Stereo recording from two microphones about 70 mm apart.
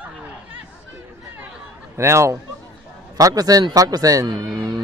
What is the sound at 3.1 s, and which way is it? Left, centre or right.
A man's voice, right.